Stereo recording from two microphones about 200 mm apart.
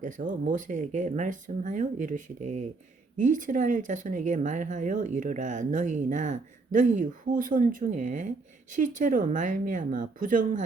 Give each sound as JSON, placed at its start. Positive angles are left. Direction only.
{"t": 0.0, "sound": "speech", "side_deg": -40}